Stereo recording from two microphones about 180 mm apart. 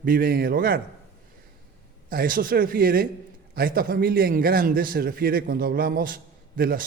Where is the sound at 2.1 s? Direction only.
55° right (ahead or behind).